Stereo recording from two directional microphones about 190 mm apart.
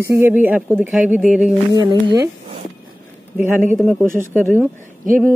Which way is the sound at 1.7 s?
25° right (ahead or behind).